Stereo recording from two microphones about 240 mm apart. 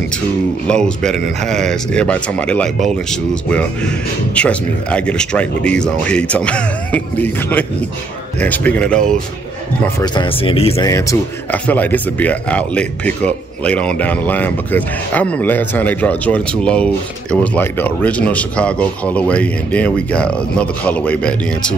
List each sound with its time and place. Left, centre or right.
0.7 s a man's voice: centre
9.9 s speech: centre
10.9 s a man's voice: centre